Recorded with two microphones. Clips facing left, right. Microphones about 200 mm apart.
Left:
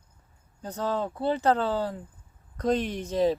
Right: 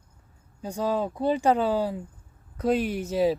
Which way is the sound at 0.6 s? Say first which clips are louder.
Right 3 dB; 10° right (ahead or behind).